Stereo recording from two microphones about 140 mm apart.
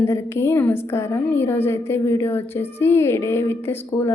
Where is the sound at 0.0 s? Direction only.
20° left (ahead or behind).